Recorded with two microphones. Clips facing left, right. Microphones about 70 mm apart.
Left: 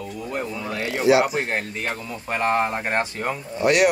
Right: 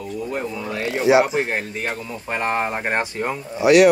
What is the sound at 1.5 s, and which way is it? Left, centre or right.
Speech, centre.